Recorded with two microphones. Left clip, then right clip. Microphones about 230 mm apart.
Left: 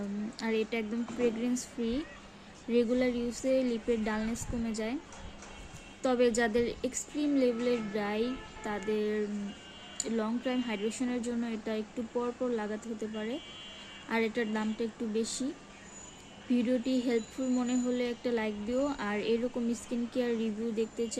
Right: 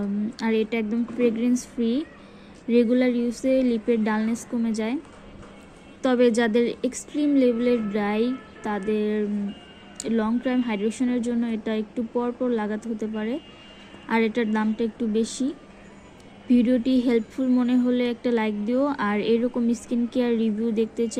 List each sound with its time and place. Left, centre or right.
0.3 s speech: right
6.0 s speech: right
16.5 s speech: right